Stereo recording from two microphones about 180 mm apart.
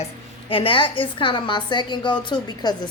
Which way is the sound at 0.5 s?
30° left (ahead or behind).